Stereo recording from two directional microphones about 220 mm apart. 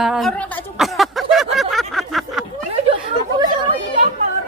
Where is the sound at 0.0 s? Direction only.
Centre (ahead or behind).